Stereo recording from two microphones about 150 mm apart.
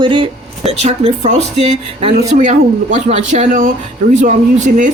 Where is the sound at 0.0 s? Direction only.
35° right (ahead or behind).